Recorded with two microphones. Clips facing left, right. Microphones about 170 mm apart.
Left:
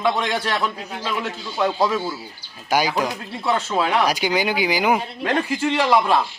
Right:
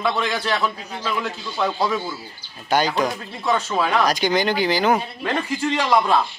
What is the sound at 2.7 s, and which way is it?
Speech, 10° left (ahead or behind).